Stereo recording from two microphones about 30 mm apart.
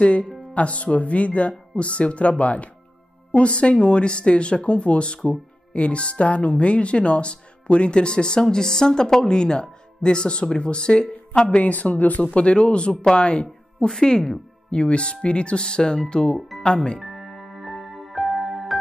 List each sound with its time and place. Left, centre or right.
0.0 s speech: left
11.6 s speech: left
12.3 s speech: left
13.8 s speech: left
14.7 s speech: left
16.3 s music: centre
16.6 s speech: left
17.0 s music: centre